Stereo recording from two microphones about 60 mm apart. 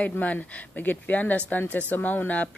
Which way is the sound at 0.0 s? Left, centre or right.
Left.